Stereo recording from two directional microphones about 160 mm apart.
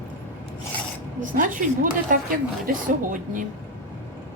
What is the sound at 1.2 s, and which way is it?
A woman's voice, 55° right (ahead or behind).